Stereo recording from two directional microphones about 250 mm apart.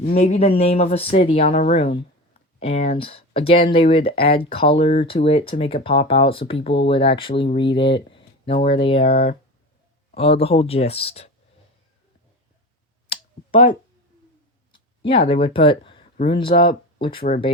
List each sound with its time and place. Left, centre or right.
0.2 s speech: left
13.1 s clicking: left
15.0 s speech: left